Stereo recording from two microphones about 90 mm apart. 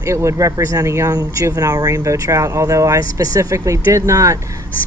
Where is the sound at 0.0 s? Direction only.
35° right (ahead or behind).